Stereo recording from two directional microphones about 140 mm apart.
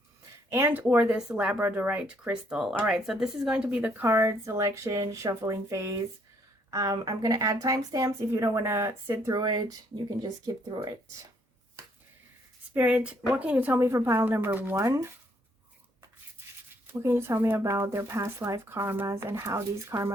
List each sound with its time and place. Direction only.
0.5 s speech: 15° right (ahead or behind)
9.3 s speech: 30° right (ahead or behind)
12.7 s speech: 10° right (ahead or behind)
16.8 s speech: 15° right (ahead or behind)